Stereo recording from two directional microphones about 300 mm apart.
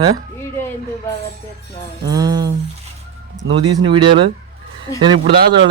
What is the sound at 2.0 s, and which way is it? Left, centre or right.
Speech, centre.